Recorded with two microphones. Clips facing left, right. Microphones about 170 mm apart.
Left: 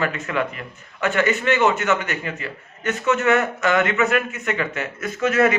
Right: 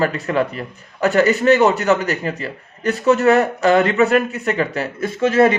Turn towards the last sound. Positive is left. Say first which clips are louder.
# right 4 dB
turn(degrees=-30)  # may be behind; listen again after turning